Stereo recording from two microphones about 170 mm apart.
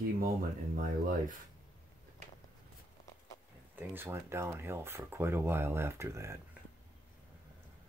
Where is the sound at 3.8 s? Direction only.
15° right (ahead or behind).